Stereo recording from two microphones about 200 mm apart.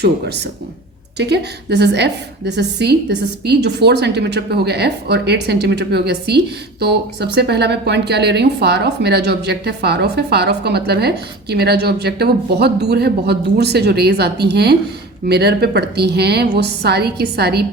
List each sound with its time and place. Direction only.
0.0 s a woman's voice: 55° right (ahead or behind)